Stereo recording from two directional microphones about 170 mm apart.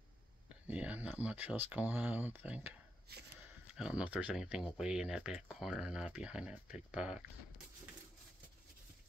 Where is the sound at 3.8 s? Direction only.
5° right (ahead or behind).